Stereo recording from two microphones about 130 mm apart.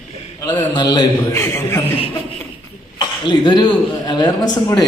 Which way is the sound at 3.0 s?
35° left (ahead or behind).